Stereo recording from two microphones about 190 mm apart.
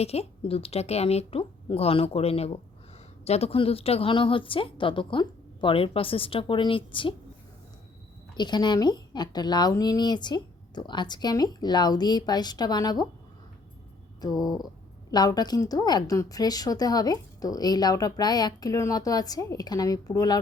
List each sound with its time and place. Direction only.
0.0 s a woman's voice: 30° left (ahead or behind)
8.4 s a woman's voice: 20° left (ahead or behind)
14.2 s a woman's voice: 20° left (ahead or behind)